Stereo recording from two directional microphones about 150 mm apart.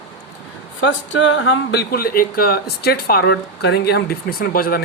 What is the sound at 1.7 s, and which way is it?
Speech, 90° left.